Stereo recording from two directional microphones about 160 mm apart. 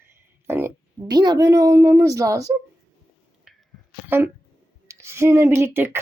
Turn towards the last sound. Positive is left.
turn(degrees=-15)  # may be behind; listen again after turning